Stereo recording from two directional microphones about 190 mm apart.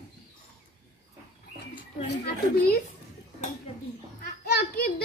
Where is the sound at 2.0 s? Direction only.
55° left (ahead or behind).